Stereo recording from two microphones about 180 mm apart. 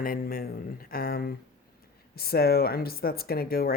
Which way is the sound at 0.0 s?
55° left (ahead or behind).